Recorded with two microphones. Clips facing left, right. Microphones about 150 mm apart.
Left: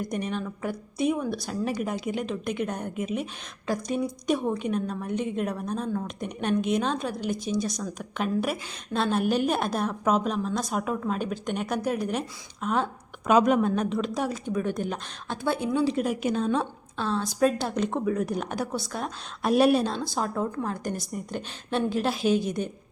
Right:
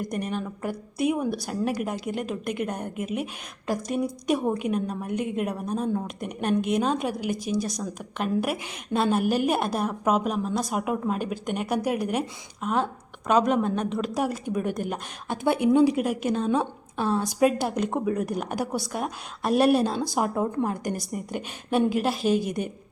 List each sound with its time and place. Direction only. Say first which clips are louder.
0.0 s a woman's voice: even; 5° right (ahead or behind)
6.2 s a woman's voice: even; 5° right (ahead or behind)
19.4 s a woman's voice: even; centre (ahead or behind)
20.0 s a woman's voice: right 3 dB; 15° right (ahead or behind)